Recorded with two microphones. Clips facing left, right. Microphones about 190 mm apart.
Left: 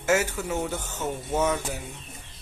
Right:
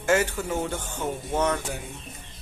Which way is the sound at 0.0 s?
10° left (ahead or behind).